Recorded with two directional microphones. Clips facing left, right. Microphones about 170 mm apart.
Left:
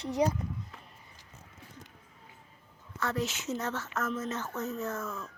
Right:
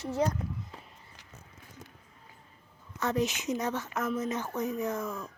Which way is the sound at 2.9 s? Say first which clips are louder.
Right 3 dB; 20° right (ahead or behind).